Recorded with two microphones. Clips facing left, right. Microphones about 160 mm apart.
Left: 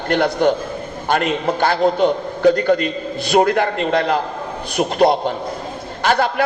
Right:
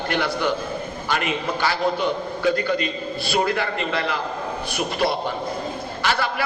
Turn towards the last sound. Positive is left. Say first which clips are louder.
# left 6 dB
turn(degrees=50)  # may be behind; listen again after turning